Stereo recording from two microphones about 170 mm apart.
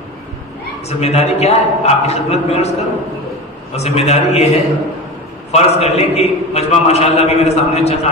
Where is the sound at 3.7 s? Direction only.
40° left (ahead or behind).